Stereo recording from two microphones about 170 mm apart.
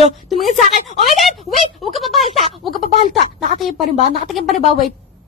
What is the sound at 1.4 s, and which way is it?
Speech, centre (ahead or behind).